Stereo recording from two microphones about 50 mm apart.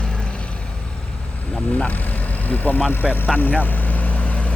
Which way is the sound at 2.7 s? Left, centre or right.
Left.